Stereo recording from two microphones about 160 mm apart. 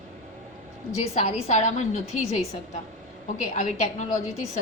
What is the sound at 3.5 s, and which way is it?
Speech, 50° left (ahead or behind).